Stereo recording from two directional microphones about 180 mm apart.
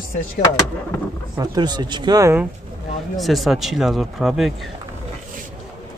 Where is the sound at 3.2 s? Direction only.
Centre (ahead or behind).